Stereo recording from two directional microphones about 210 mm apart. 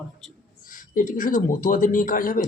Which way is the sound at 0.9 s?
40° left (ahead or behind).